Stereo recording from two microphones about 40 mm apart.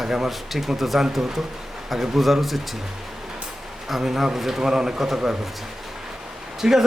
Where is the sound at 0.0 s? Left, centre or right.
Centre.